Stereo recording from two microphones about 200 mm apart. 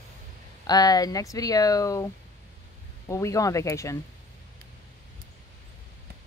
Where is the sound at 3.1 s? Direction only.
15° left (ahead or behind).